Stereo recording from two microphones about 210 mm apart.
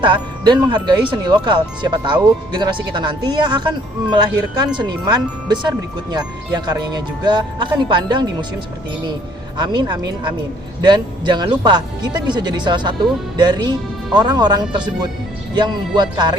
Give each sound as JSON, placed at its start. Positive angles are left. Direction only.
{"t": 0.0, "sound": "speech", "side_deg": -20}
{"t": 9.6, "sound": "speech", "side_deg": -20}